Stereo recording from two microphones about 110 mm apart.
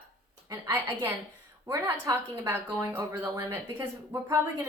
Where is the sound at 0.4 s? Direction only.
30° right (ahead or behind).